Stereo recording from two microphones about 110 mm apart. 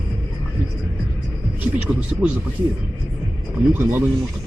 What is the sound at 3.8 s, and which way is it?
Speech, 20° right (ahead or behind).